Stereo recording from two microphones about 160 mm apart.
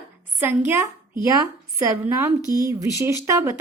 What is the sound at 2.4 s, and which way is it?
Speech, 25° left (ahead or behind).